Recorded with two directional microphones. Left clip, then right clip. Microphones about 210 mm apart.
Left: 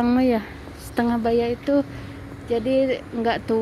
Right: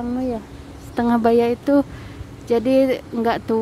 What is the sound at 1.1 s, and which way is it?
Speech, 25° right (ahead or behind).